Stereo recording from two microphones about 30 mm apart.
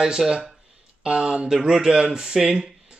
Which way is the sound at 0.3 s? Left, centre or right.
Centre.